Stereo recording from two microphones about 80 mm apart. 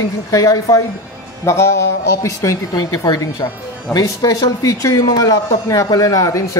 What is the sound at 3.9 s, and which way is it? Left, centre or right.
Speech, left.